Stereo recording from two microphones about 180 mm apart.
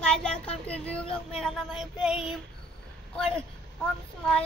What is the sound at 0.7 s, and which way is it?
Child singing, 5° left (ahead or behind).